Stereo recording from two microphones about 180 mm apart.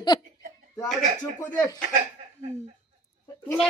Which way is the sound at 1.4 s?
15° left (ahead or behind).